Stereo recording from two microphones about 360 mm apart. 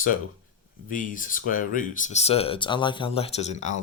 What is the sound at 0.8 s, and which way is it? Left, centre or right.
Speech, left.